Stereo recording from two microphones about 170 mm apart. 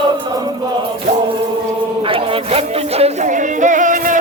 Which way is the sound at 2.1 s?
35° right (ahead or behind).